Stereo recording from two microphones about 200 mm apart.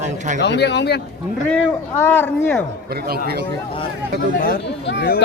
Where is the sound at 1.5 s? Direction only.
5° left (ahead or behind).